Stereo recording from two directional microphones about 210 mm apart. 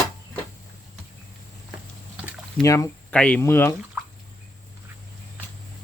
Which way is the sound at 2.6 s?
15° left (ahead or behind).